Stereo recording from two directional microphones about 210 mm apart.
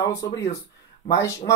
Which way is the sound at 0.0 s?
20° left (ahead or behind).